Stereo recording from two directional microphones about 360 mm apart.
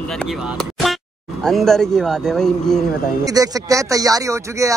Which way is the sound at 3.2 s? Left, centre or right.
Centre.